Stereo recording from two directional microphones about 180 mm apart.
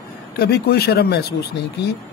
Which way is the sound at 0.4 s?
65° left (ahead or behind).